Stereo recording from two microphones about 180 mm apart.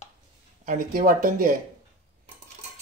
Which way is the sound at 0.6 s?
50° right (ahead or behind).